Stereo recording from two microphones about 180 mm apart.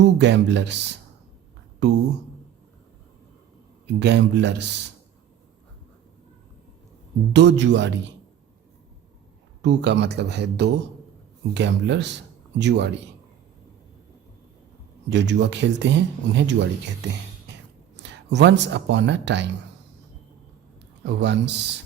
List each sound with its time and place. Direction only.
0.2 s speech: 75° right (ahead or behind)
3.8 s speech: 75° right (ahead or behind)
7.3 s speech: 80° right
9.6 s speech: 70° right (ahead or behind)
15.1 s speech: 75° right (ahead or behind)
21.0 s speech: 70° right (ahead or behind)